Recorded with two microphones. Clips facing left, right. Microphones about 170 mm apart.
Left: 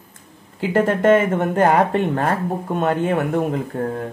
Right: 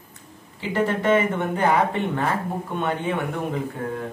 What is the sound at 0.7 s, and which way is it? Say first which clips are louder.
Speech: left 5 dB; 45° left (ahead or behind).